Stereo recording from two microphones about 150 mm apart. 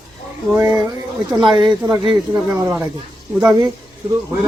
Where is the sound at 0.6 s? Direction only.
20° right (ahead or behind).